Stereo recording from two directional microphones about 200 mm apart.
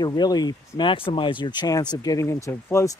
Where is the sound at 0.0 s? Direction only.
20° left (ahead or behind).